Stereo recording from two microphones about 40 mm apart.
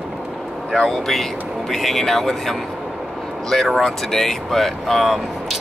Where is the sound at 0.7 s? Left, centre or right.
Centre.